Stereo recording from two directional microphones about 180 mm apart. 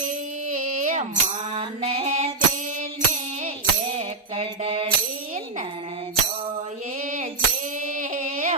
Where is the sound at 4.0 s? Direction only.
35° right (ahead or behind).